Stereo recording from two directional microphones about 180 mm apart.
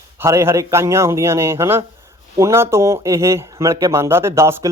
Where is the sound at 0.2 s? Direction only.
15° right (ahead or behind).